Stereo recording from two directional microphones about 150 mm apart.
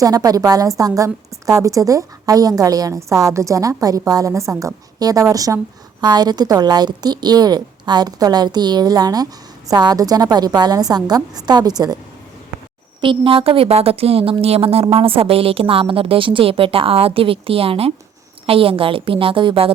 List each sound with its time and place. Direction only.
0.0 s a woman's voice: 25° right (ahead or behind)
13.0 s a woman's voice: 35° right (ahead or behind)